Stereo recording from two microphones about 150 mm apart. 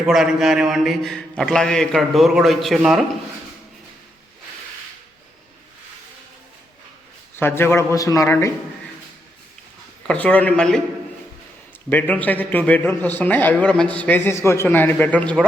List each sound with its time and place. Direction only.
0.0 s a man's voice: centre (ahead or behind)
7.3 s a man's voice: 15° left (ahead or behind)
10.1 s a man's voice: 10° left (ahead or behind)
11.9 s a man's voice: 10° left (ahead or behind)